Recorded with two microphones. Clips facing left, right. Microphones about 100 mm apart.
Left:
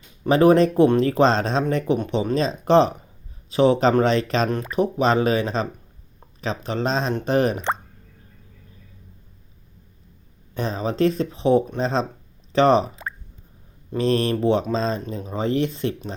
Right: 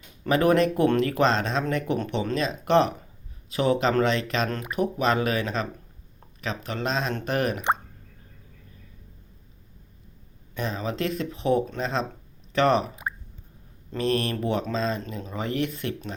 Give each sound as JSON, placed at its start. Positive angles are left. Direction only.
{"t": 0.3, "sound": "speech", "side_deg": 30}
{"t": 2.0, "sound": "speech", "side_deg": 15}
{"t": 10.5, "sound": "speech", "side_deg": 35}
{"t": 13.9, "sound": "speech", "side_deg": 30}